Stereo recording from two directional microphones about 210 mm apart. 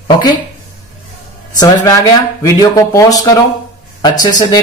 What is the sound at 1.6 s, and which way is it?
Speech, 15° left (ahead or behind).